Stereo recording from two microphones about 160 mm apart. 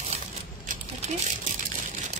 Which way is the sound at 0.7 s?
50° right (ahead or behind).